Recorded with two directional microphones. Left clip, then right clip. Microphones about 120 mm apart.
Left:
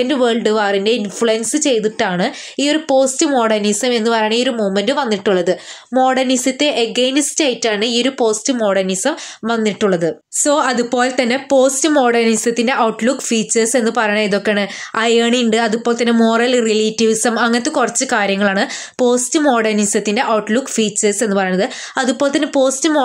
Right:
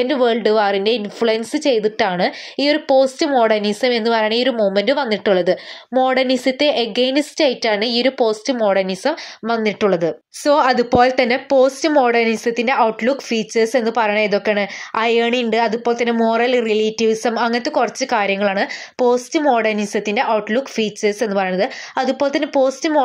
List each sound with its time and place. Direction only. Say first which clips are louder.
0.0 s a woman's voice: left 1 dB; 30° right (ahead or behind); by 23.0 s 15° right (ahead or behind)